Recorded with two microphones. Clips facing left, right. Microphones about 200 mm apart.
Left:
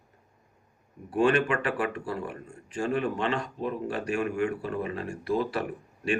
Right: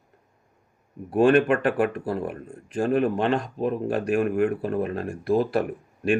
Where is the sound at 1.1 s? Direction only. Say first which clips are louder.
Right 6 dB; 50° right (ahead or behind).